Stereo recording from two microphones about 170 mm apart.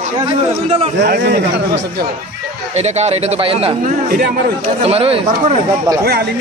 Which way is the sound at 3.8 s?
60° right (ahead or behind).